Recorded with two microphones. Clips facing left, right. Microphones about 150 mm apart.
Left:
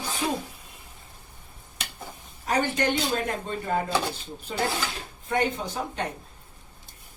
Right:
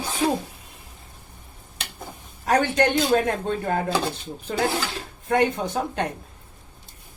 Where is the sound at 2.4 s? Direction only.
70° right (ahead or behind).